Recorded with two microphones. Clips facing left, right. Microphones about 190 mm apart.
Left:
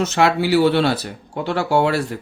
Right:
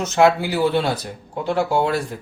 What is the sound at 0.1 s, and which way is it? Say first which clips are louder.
Speech: right 5 dB; 75° left (ahead or behind).